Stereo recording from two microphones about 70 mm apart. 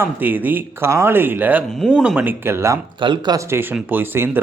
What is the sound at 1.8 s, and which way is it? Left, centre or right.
Speech, centre.